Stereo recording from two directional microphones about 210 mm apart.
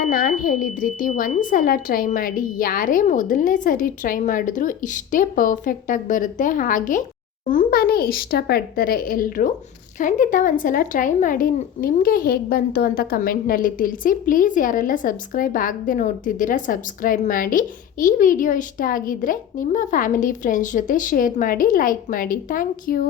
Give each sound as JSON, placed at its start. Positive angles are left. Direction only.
{"t": 0.0, "sound": "speech", "side_deg": 45}